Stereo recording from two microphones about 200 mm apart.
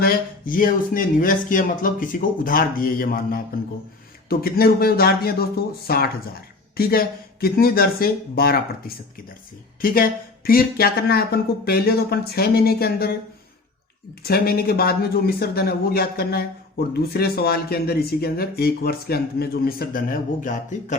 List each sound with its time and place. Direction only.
0.0 s speech: 45° left (ahead or behind)
9.8 s speech: 45° left (ahead or behind)
14.3 s speech: 50° left (ahead or behind)